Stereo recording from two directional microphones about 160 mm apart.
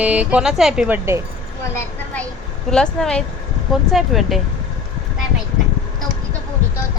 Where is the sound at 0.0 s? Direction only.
10° right (ahead or behind).